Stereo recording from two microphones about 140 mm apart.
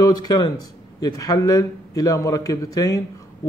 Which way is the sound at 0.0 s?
30° left (ahead or behind).